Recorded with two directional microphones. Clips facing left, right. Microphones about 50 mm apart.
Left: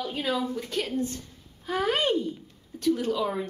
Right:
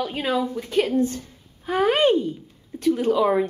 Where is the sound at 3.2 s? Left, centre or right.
Right.